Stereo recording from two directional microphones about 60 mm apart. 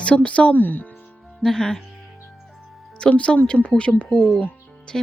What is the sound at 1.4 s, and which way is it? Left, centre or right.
Speech, centre.